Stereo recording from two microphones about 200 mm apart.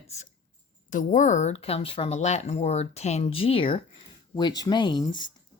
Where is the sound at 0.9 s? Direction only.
40° left (ahead or behind).